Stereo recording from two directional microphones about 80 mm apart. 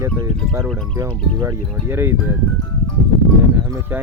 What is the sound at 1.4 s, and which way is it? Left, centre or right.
Speech, right.